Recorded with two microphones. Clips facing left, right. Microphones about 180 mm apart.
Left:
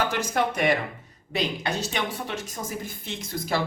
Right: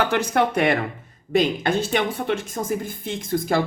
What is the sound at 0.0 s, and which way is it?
Speech, 60° right (ahead or behind).